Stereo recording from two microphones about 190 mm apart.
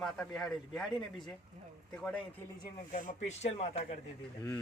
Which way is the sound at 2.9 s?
40° left (ahead or behind).